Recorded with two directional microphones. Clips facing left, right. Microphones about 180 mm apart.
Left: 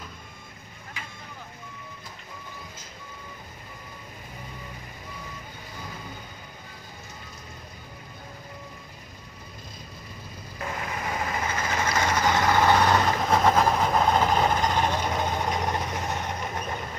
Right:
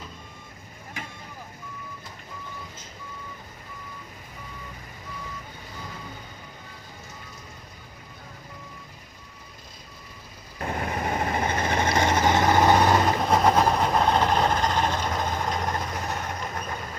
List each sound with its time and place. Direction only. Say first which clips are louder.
1.0 s vehicle: right 4 dB; 50° right (ahead or behind)
10.6 s vehicle: right 4 dB; 45° right (ahead or behind); by 16.8 s 15° left (ahead or behind)